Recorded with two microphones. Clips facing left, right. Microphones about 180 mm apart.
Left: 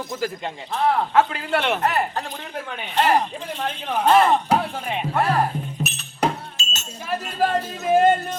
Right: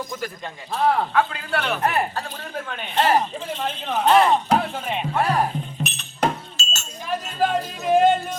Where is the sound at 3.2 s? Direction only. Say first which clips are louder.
Right 1 dB; 10° left (ahead or behind).